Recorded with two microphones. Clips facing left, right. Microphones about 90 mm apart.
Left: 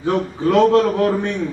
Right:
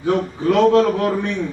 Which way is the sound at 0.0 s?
35° left (ahead or behind).